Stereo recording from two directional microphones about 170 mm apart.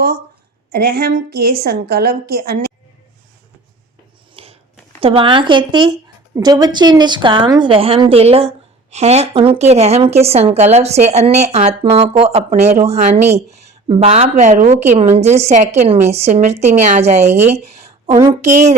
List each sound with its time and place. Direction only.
0.7 s a woman's voice: 65° right (ahead or behind)
4.4 s a sound: 35° right (ahead or behind)
4.9 s a woman's voice: 30° right (ahead or behind)
17.3 s a woman's voice: 15° right (ahead or behind)
17.6 s a sound: 40° right (ahead or behind)
18.2 s a woman's voice: 15° right (ahead or behind)